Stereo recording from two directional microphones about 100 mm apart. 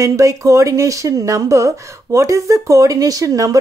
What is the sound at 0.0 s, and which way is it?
Speech, 35° right (ahead or behind).